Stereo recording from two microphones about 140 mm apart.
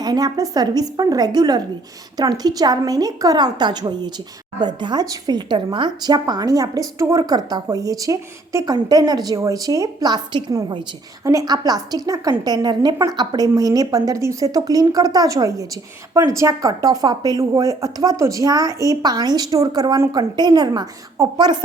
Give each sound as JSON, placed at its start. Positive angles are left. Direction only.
{"t": 0.0, "sound": "speech", "side_deg": -30}